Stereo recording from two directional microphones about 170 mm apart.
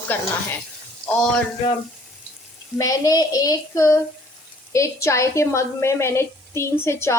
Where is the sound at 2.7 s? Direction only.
20° left (ahead or behind).